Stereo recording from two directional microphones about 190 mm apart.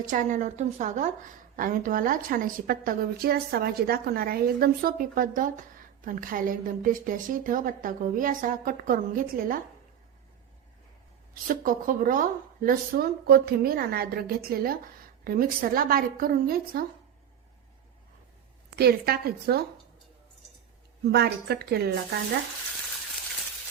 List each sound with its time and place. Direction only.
0.1 s a woman's voice: 45° right (ahead or behind)
11.4 s a woman's voice: 45° right (ahead or behind)
18.8 s a woman's voice: 55° right (ahead or behind)
21.0 s a woman's voice: 60° right (ahead or behind)